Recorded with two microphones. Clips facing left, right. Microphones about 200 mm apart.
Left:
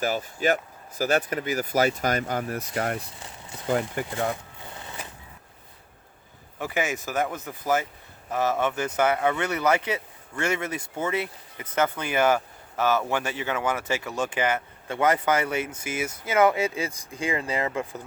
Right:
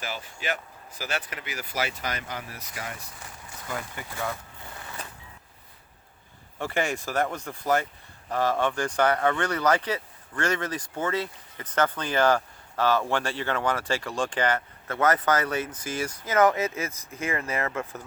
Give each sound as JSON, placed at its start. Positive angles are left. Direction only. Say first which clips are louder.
{"t": 0.0, "sound": "speech", "louder": "left 9 dB", "side_deg": 45}
{"t": 3.2, "sound": "walk", "louder": "left 3 dB", "side_deg": 25}
{"t": 6.6, "sound": "speech", "louder": "even", "side_deg": 5}